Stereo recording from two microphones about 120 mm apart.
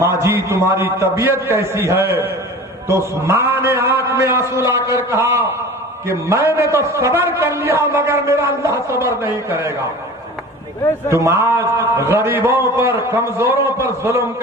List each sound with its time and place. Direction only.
0.0 s a man's voice: 20° right (ahead or behind)
11.1 s a man's voice: 25° right (ahead or behind)